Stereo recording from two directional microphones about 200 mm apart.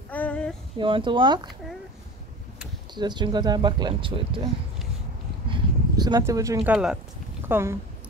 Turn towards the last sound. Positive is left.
turn(degrees=-15)  # may be behind; listen again after turning